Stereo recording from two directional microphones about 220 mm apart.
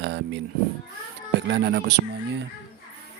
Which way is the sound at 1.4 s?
50° right (ahead or behind).